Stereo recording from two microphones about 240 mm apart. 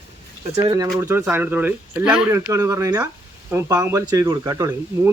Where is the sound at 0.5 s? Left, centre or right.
Centre.